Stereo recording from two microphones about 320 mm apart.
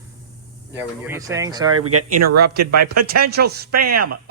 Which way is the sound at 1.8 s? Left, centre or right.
Right.